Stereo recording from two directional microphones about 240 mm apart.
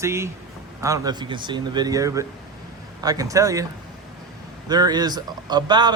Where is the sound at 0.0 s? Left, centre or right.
Centre.